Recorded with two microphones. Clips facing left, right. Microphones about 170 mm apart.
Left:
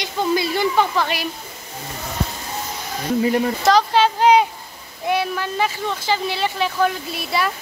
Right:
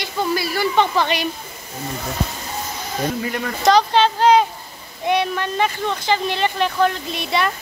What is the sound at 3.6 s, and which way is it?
Speech, centre (ahead or behind).